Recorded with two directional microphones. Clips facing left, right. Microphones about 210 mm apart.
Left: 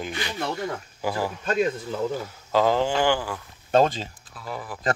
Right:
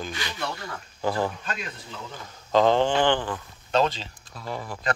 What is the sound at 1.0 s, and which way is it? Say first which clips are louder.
Speech: right 2 dB; 10° left (ahead or behind).